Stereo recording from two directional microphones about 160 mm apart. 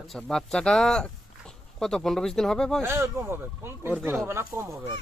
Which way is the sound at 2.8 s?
15° right (ahead or behind).